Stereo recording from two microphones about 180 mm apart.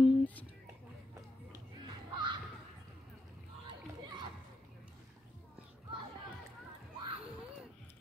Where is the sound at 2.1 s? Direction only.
25° right (ahead or behind).